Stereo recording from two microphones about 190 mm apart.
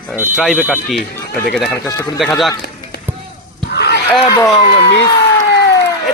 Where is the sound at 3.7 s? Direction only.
60° left (ahead or behind).